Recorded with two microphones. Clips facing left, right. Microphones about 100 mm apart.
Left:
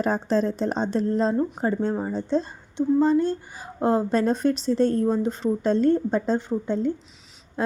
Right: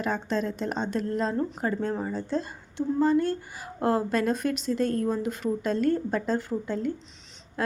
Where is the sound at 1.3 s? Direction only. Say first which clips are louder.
Left 4 dB; 15° left (ahead or behind).